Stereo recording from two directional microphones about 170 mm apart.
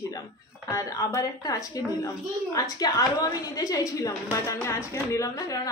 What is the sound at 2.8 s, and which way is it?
A woman's voice, 20° left (ahead or behind).